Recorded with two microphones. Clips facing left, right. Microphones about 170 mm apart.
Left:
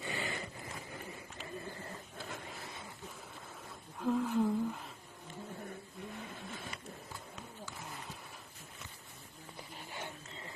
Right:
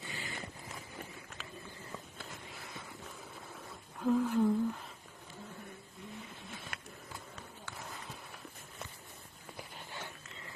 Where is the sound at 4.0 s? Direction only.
Centre (ahead or behind).